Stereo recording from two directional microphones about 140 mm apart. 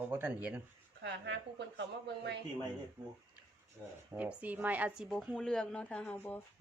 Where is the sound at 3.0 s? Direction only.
20° right (ahead or behind).